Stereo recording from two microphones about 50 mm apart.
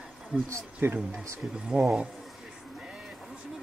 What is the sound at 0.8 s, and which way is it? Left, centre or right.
Speech, right.